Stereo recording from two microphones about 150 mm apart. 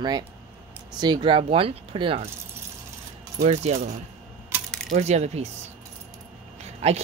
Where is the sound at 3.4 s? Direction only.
45° right (ahead or behind).